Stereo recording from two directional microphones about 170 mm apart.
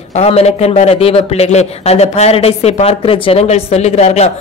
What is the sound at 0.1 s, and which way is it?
A man's voice, 40° left (ahead or behind).